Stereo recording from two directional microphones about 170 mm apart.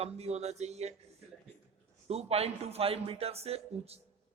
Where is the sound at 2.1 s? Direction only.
35° right (ahead or behind).